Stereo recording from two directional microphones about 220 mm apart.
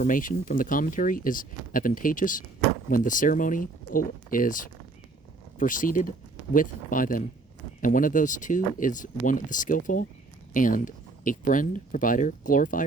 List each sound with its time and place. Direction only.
0.0 s speech: 35° left (ahead or behind)